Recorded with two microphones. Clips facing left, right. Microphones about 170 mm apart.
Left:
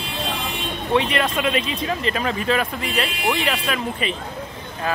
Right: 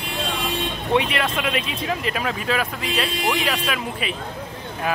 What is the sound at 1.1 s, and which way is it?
A man's voice, 5° right (ahead or behind).